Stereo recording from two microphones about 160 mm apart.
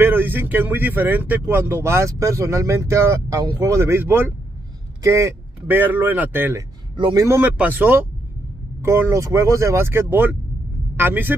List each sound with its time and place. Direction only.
0.0 s speech: 15° right (ahead or behind)
7.0 s a man's voice: 25° right (ahead or behind)
7.2 s speech: 10° right (ahead or behind)